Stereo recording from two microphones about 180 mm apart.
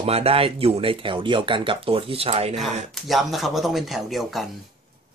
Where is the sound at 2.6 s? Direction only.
Centre (ahead or behind).